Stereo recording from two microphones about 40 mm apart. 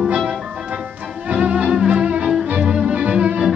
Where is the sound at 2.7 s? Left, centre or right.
Right.